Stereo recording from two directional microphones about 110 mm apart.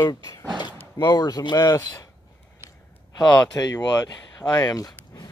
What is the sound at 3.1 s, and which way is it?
Speech, 35° left (ahead or behind).